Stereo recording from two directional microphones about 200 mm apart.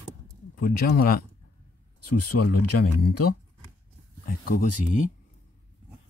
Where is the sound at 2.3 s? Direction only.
65° left (ahead or behind).